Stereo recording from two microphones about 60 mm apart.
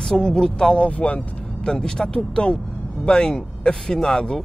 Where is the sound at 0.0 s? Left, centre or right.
Centre.